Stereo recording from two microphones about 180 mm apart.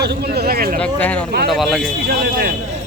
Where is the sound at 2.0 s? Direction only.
55° right (ahead or behind).